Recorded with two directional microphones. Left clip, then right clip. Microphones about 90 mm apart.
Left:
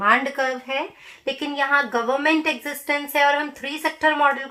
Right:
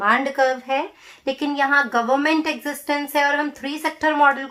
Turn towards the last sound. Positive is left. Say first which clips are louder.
# right 2 dB
turn(degrees=-40)  # may be behind; listen again after turning